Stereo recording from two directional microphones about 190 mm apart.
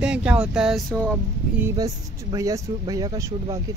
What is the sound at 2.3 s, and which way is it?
Speech, 20° right (ahead or behind).